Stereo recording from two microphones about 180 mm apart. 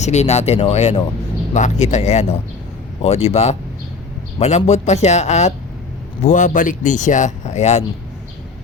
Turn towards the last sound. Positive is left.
turn(degrees=35)  # may be behind; listen again after turning